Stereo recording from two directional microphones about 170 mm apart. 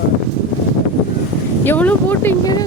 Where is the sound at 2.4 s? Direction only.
20° left (ahead or behind).